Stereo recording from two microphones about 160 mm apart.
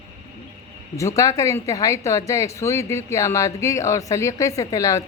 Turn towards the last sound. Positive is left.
turn(degrees=20)  # may be behind; listen again after turning